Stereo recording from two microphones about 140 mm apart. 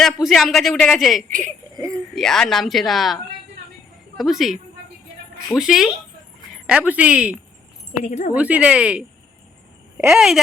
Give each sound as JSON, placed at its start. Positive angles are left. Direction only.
{"t": 0.0, "sound": "a man's voice", "side_deg": 0}
{"t": 1.3, "sound": "speech", "side_deg": -65}
{"t": 1.7, "sound": "a sound", "side_deg": -25}
{"t": 2.1, "sound": "a man's voice", "side_deg": 5}
{"t": 4.2, "sound": "a man's voice", "side_deg": 0}
{"t": 5.5, "sound": "a man's voice", "side_deg": -5}
{"t": 8.0, "sound": "speech", "side_deg": 60}
{"t": 8.3, "sound": "a man's voice", "side_deg": -10}